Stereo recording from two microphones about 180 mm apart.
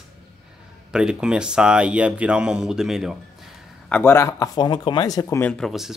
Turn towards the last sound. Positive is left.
turn(degrees=0)  # may be behind; listen again after turning